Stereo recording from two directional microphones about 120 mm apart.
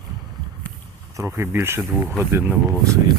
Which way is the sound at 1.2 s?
25° right (ahead or behind).